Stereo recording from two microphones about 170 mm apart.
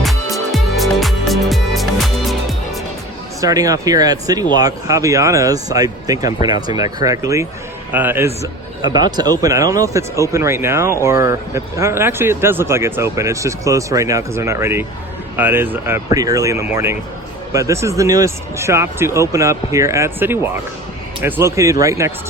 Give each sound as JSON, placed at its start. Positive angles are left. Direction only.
{"t": 0.0, "sound": "music", "side_deg": 0}
{"t": 3.4, "sound": "a man's voice", "side_deg": -20}